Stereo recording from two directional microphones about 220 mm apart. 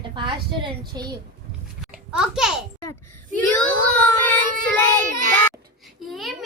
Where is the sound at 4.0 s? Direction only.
10° left (ahead or behind).